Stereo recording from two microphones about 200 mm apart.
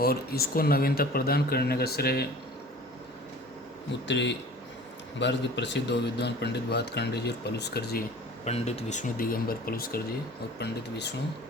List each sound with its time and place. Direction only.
0.0 s a man's voice: 50° left (ahead or behind)
4.0 s speech: 60° left (ahead or behind)
8.4 s a man's voice: 30° left (ahead or behind); by 10.0 s 45° left (ahead or behind)
10.6 s speech: 60° left (ahead or behind)